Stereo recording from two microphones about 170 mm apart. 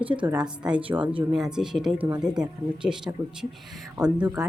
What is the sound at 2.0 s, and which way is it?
Speech, 15° right (ahead or behind).